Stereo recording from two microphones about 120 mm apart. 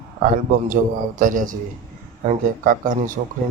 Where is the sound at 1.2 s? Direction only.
90° right.